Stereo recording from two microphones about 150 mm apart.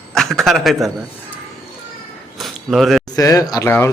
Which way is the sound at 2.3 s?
Centre (ahead or behind).